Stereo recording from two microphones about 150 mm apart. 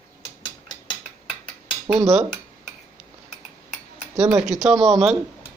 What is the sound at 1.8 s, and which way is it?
Speech, 20° right (ahead or behind).